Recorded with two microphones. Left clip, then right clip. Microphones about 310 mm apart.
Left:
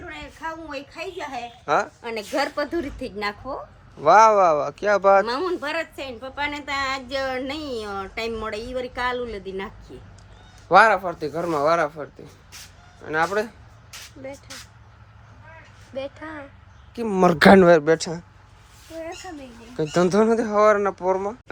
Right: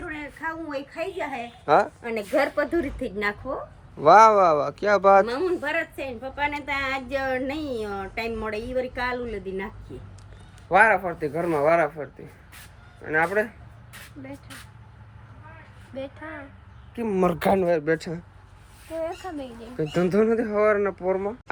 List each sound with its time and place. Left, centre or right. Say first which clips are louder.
0.4 s a woman's voice: right 1 dB; centre
10.7 s speech: left 3 dB; centre
16.0 s speech: left 3 dB; left
17.7 s speech: left 5 dB; centre
19.7 s speech: left 3 dB; centre